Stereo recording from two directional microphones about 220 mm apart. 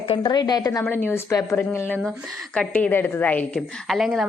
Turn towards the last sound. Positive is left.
turn(degrees=0)  # may be behind; listen again after turning